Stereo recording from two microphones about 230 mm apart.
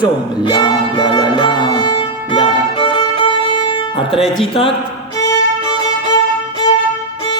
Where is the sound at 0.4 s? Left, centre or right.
Centre.